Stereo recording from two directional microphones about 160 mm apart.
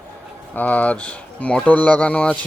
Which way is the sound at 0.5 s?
10° left (ahead or behind).